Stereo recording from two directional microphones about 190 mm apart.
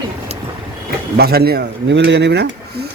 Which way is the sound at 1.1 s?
55° right (ahead or behind).